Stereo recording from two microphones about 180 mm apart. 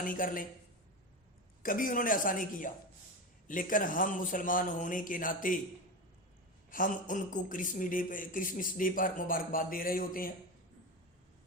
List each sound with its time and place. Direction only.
0.0 s speech: 50° left (ahead or behind)
1.6 s speech: 50° left (ahead or behind)
6.7 s speech: 50° left (ahead or behind)